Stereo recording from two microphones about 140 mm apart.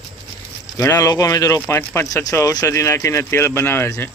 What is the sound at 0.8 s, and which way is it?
Speech, 20° left (ahead or behind).